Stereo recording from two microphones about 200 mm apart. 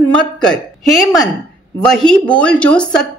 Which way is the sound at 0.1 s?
5° left (ahead or behind).